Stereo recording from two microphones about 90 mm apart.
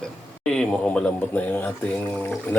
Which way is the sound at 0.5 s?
10° left (ahead or behind).